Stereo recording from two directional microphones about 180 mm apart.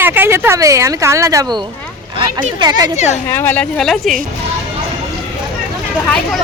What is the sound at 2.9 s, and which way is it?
Speech, 40° left (ahead or behind).